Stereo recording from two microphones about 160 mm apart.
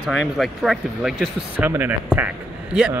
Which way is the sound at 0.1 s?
Centre (ahead or behind).